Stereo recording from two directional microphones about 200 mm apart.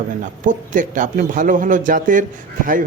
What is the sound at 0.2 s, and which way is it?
A man's voice, 40° right (ahead or behind).